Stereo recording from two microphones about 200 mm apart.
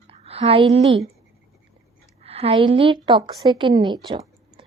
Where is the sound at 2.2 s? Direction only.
30° right (ahead or behind).